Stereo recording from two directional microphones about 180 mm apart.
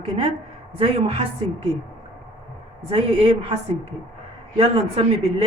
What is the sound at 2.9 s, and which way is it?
A woman's voice, 30° right (ahead or behind).